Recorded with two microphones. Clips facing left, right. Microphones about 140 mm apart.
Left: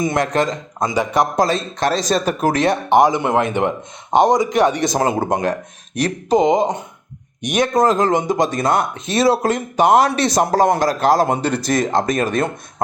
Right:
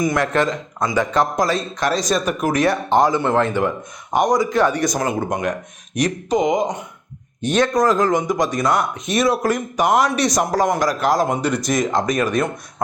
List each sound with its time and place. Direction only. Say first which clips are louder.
0.0 s speech: even; 25° left (ahead or behind)
1.4 s speech: left 2 dB; 25° left (ahead or behind)
2.9 s speech: left 3 dB; 15° left (ahead or behind)
7.4 s speech: right 1 dB; 15° left (ahead or behind)
7.7 s speech: left 5 dB; 25° left (ahead or behind)
11.9 s speech: left 1 dB; 50° left (ahead or behind)
12.2 s speech: even; 25° left (ahead or behind)